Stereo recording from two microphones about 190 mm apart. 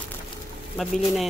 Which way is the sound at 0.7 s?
Centre (ahead or behind).